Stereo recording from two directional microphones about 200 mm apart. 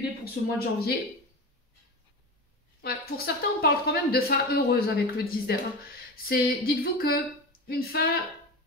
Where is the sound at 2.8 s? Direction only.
50° left (ahead or behind).